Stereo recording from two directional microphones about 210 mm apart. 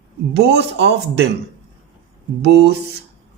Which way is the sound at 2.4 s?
50° right (ahead or behind).